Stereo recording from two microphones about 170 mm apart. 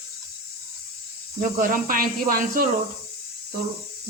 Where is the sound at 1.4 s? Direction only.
55° right (ahead or behind).